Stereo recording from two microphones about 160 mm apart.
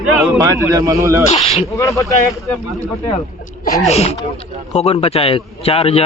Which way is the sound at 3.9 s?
40° left (ahead or behind).